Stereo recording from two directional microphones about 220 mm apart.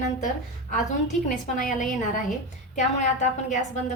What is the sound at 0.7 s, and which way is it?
A woman's voice, 35° left (ahead or behind).